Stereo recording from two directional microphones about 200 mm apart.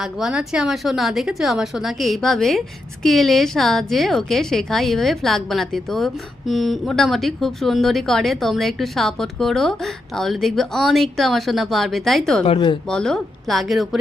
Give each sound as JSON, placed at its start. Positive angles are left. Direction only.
{"t": 0.0, "sound": "a woman's voice", "side_deg": 0}
{"t": 12.5, "sound": "speech", "side_deg": 25}
{"t": 12.9, "sound": "a woman's voice", "side_deg": 5}